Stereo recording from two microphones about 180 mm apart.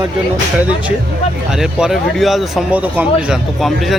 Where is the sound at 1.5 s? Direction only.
Centre (ahead or behind).